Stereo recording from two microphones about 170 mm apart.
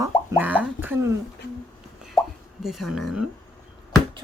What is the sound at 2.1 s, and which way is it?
Plop, centre (ahead or behind).